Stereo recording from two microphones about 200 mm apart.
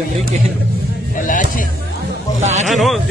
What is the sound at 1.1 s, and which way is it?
Music, 40° left (ahead or behind).